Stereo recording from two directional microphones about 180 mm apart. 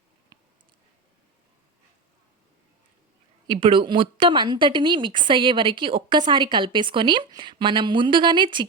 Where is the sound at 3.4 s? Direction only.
25° right (ahead or behind).